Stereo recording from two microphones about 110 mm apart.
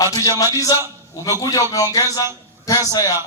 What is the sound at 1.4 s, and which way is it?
A man's voice, 35° left (ahead or behind).